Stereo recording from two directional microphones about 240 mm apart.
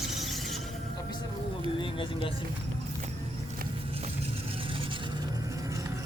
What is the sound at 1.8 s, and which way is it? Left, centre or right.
Speech, left.